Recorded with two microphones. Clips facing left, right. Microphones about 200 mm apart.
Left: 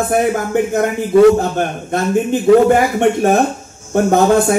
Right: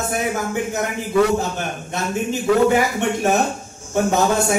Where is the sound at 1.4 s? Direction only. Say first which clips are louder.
Left 7 dB; 55° left (ahead or behind).